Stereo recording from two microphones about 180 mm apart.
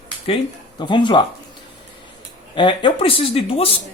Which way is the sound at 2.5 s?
25° left (ahead or behind).